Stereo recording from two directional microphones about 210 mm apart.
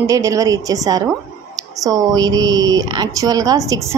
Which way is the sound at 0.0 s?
15° right (ahead or behind).